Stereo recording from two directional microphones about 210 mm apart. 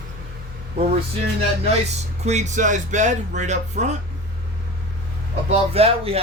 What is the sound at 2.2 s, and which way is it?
Speech, 35° right (ahead or behind).